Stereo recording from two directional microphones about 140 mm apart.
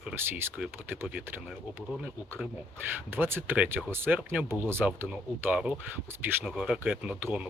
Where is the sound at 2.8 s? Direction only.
15° right (ahead or behind).